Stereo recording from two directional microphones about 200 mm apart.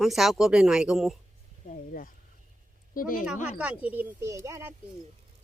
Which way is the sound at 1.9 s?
45° left (ahead or behind).